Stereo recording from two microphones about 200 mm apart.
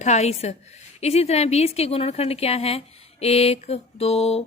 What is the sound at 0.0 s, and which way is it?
A woman's voice, 35° left (ahead or behind).